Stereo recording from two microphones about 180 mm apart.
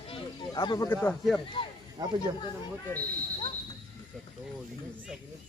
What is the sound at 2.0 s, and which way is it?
Speech, 20° right (ahead or behind).